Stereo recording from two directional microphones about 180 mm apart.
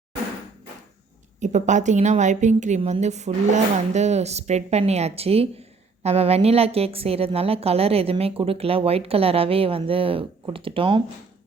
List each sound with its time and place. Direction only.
1.4 s a woman's voice: 40° right (ahead or behind)